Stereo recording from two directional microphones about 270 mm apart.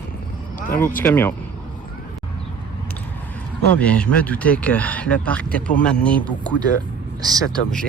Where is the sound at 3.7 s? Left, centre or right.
Centre.